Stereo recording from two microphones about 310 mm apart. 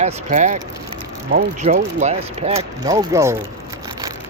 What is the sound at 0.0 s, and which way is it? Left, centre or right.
Speech, right.